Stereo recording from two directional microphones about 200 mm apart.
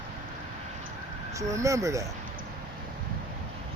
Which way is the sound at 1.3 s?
15° right (ahead or behind).